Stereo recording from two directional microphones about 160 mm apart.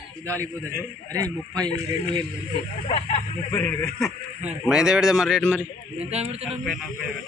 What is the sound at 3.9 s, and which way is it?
Speech, centre (ahead or behind).